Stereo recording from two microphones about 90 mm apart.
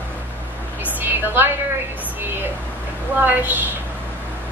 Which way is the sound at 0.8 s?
20° right (ahead or behind).